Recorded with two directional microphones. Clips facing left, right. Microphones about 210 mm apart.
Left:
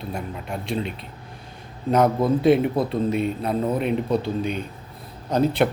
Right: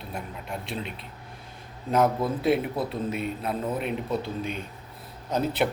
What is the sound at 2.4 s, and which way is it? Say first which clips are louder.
A man's voice: left 6 dB; 5° right (ahead or behind).